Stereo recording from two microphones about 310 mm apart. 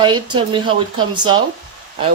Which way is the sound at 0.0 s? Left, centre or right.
Centre.